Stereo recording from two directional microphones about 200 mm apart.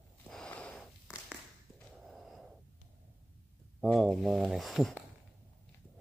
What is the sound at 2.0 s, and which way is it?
Gasp, centre (ahead or behind).